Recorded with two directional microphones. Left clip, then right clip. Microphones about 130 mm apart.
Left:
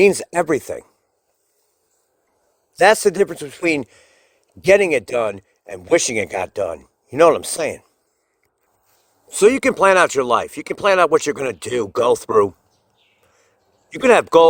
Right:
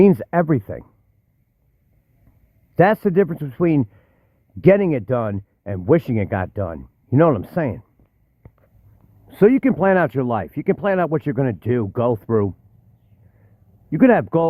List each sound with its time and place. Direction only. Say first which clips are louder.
0.0 s speech: left 1 dB; 15° left (ahead or behind)
2.7 s speech: left 2 dB; 20° left (ahead or behind)
9.3 s speech: left 1 dB; 15° left (ahead or behind); by 12.5 s 35° left (ahead or behind)
13.9 s speech: left 4 dB; 25° left (ahead or behind)